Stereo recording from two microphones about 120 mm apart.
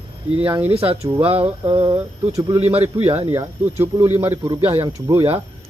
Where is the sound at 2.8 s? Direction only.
15° right (ahead or behind).